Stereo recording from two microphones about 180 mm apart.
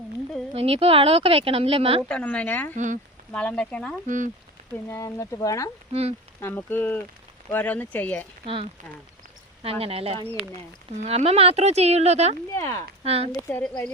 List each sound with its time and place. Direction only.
0.5 s speech: 30° right (ahead or behind)
2.0 s speech: 5° left (ahead or behind)
2.7 s speech: 45° right (ahead or behind)
3.3 s speech: 5° left (ahead or behind)
4.0 s speech: 45° right (ahead or behind)
4.7 s speech: 15° left (ahead or behind)
5.9 s speech: 35° right (ahead or behind)
6.4 s speech: 10° left (ahead or behind)
9.6 s speech: 35° right (ahead or behind)
12.5 s speech: 15° left (ahead or behind)
13.1 s speech: 35° right (ahead or behind)
13.5 s speech: 5° left (ahead or behind)